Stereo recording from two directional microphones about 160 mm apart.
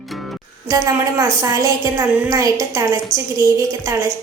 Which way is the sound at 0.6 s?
20° right (ahead or behind).